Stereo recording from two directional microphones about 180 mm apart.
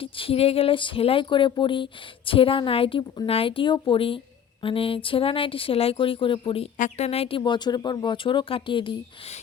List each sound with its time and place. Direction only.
0.0 s speech: 30° left (ahead or behind)
6.7 s speech: 40° left (ahead or behind)